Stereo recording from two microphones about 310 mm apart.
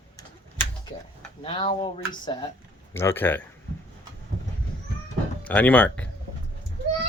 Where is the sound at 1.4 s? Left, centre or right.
Centre.